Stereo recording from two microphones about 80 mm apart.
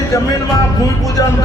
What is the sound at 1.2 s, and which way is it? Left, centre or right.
Speech, left.